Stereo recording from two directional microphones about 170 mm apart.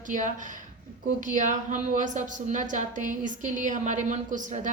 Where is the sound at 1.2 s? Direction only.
50° right (ahead or behind).